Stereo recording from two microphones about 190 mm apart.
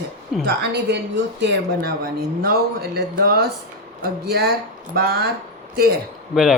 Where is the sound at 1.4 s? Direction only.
60° right (ahead or behind).